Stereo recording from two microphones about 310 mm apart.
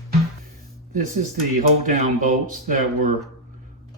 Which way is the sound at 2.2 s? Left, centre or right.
Right.